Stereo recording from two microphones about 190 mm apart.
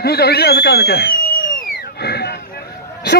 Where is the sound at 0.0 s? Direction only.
55° left (ahead or behind).